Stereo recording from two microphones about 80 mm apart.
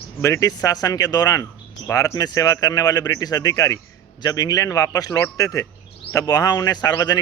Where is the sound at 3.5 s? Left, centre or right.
Left.